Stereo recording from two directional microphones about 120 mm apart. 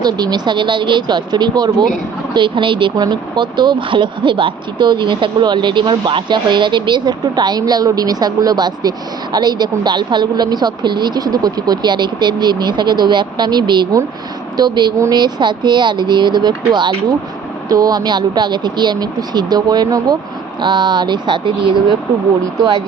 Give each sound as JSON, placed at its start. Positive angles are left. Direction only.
{"t": 0.0, "sound": "speech", "side_deg": -35}